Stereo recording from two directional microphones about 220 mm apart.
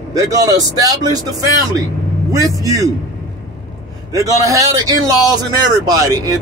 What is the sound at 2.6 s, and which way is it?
Speech, 15° right (ahead or behind).